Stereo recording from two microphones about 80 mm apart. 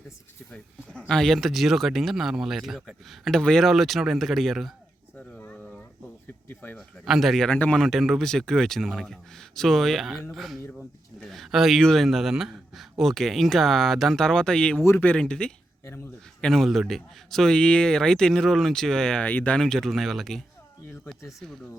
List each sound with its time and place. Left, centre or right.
0.5 s speech: centre
6.5 s speech: left
6.7 s speech: centre
7.5 s speech: centre
7.8 s a man's voice: centre
12.0 s a man's voice: centre